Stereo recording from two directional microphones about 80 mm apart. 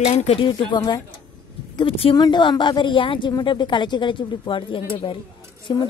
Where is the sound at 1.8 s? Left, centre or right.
Left.